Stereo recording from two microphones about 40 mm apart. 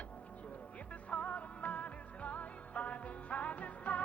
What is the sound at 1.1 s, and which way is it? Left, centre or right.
Music, left.